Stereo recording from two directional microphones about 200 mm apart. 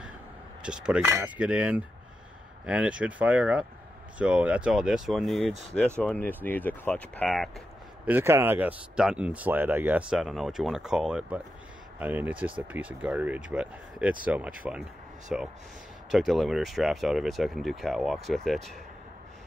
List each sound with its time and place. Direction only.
0.6 s speech: 5° right (ahead or behind)